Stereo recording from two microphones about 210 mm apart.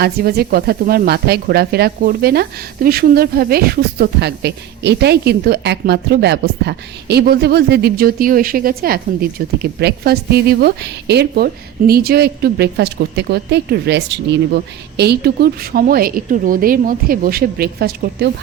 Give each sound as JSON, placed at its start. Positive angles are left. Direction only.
{"t": 0.0, "sound": "speech", "side_deg": -50}